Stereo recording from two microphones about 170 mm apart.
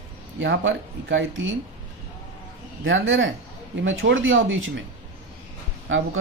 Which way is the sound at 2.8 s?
90° right.